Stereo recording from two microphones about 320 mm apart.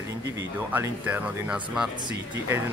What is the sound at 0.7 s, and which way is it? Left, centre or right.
Speech, centre.